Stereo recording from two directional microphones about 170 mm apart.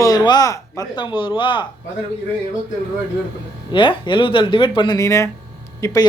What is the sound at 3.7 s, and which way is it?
Speech, 30° left (ahead or behind).